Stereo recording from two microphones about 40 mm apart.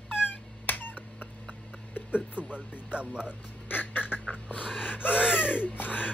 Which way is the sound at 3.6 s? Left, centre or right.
Left.